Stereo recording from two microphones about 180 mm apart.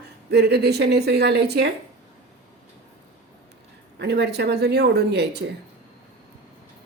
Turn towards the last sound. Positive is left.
turn(degrees=-65)  # may be behind; listen again after turning